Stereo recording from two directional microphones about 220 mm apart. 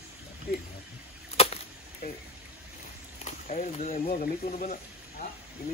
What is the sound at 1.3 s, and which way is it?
Chop, 30° left (ahead or behind).